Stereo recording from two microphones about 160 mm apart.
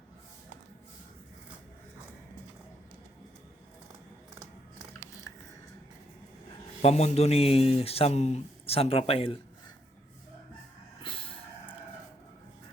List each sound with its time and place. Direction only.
6.8 s speech: 40° left (ahead or behind)
11.0 s vehicle: 30° left (ahead or behind)